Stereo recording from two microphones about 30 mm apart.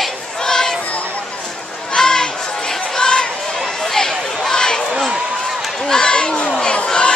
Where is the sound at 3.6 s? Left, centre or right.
Centre.